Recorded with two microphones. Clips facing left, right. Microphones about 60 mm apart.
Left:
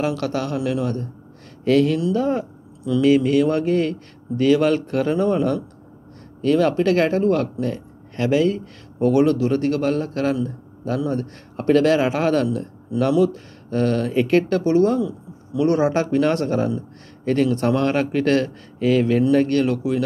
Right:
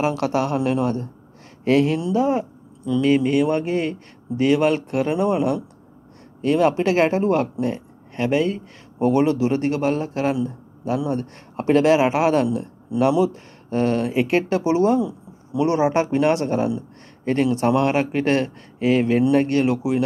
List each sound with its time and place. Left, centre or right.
0.1 s speech: right
1.7 s speech: centre
2.2 s speech: centre; by 7.8 s right
8.2 s speech: centre; by 15.6 s right
15.7 s speech: centre